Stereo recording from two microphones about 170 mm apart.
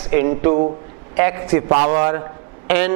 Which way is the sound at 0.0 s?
15° right (ahead or behind).